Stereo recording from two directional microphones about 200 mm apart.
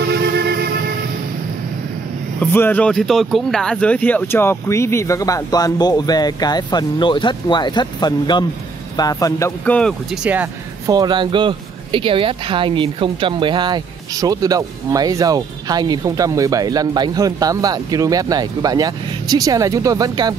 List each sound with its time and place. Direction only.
0.1 s music: 55° right (ahead or behind)
2.4 s speech: 10° left (ahead or behind)
9.8 s speech: 5° left (ahead or behind)
10.9 s speech: 20° right (ahead or behind)